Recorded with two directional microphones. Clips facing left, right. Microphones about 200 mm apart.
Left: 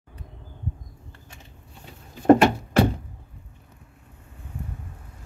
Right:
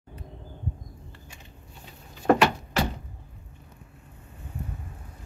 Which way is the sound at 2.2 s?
50° left (ahead or behind).